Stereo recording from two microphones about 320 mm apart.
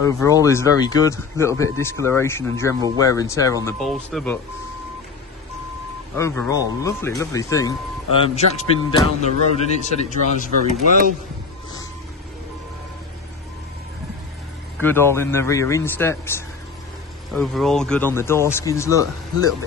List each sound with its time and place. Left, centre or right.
0.0 s speech: centre
6.1 s speech: centre
10.7 s speech: right
14.8 s speech: centre